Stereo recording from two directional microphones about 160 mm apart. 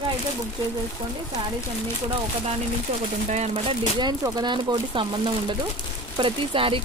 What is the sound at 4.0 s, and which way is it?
Speech, 25° right (ahead or behind).